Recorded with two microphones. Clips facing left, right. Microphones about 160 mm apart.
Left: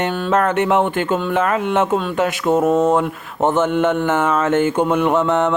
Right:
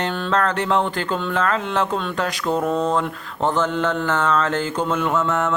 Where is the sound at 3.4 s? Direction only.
25° left (ahead or behind).